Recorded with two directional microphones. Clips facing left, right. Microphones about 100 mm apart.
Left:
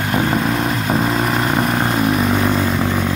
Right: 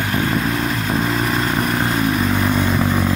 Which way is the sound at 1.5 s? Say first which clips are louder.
Left 2 dB; 30° left (ahead or behind).